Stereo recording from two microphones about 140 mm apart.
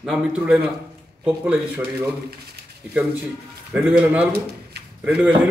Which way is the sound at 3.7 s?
10° right (ahead or behind).